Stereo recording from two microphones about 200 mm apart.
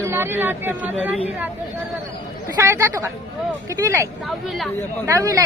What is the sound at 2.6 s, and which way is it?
Speech, 15° right (ahead or behind).